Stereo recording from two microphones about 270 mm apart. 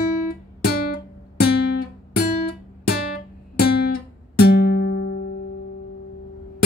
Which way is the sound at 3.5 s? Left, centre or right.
Left.